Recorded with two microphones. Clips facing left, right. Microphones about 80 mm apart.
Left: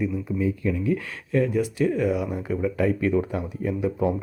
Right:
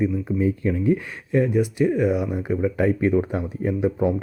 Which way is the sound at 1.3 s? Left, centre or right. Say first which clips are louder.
Right 2 dB; right.